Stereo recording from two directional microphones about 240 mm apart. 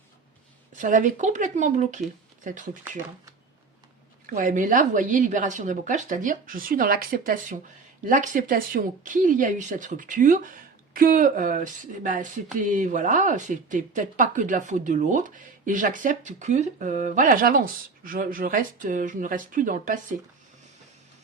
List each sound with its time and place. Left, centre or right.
0.8 s speech: right
4.3 s speech: right